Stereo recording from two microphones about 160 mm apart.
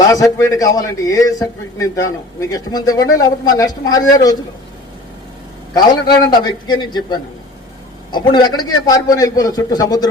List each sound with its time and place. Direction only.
0.1 s a man's voice: 20° left (ahead or behind)
5.7 s a man's voice: 25° left (ahead or behind)